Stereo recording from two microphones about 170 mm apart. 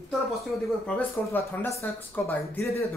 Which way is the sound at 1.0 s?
10° left (ahead or behind).